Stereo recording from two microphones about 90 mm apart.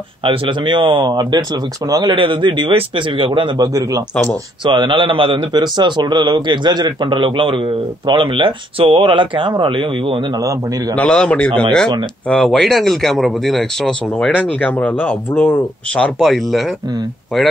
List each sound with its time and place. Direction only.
0.2 s speech: 70° right (ahead or behind)
1.9 s speech: 45° right (ahead or behind)
2.1 s a man's voice: 65° right (ahead or behind)
3.5 s a man's voice: 40° right (ahead or behind)
4.1 s speech: 15° left (ahead or behind)
4.6 s a man's voice: 65° right (ahead or behind); by 5.4 s 85° right
5.5 s a man's voice: 55° right (ahead or behind); by 10.2 s 70° right (ahead or behind)
11.0 s a man's voice: 10° left (ahead or behind)
14.1 s speech: 15° left (ahead or behind)